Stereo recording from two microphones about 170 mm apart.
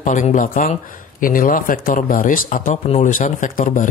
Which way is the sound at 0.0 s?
45° left (ahead or behind).